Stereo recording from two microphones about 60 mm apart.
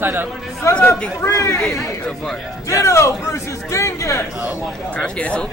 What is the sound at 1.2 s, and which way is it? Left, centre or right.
Speech, left.